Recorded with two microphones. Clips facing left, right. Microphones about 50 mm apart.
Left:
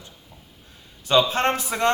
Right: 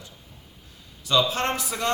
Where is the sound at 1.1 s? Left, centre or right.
Left.